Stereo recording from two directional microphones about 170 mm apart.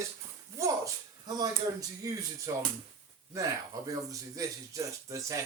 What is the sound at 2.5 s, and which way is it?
Speech, 20° right (ahead or behind).